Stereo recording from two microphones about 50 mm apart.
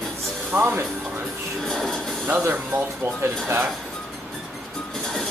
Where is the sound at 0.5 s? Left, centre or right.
Right.